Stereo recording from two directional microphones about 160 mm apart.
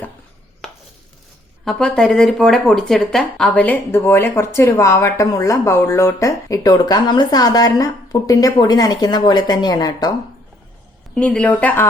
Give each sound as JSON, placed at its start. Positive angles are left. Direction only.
{"t": 0.6, "sound": "chopping", "side_deg": 0}
{"t": 1.6, "sound": "speech", "side_deg": 5}
{"t": 11.1, "sound": "speech", "side_deg": 5}